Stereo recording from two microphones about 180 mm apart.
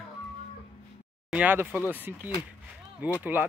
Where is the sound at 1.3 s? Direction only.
10° right (ahead or behind).